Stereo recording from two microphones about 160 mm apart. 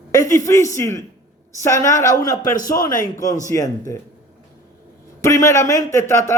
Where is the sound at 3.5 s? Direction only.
20° left (ahead or behind).